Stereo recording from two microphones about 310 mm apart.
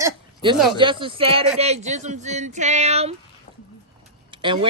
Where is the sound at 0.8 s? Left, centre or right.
Centre.